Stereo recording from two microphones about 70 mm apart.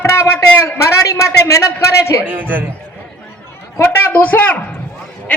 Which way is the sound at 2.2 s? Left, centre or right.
Right.